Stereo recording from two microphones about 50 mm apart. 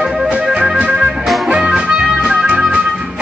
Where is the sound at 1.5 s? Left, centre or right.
Right.